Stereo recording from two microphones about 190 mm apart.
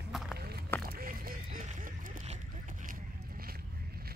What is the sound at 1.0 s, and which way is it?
Rowboat, 50° right (ahead or behind).